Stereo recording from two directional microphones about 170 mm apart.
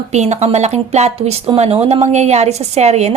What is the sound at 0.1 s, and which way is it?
A woman's voice, 40° right (ahead or behind).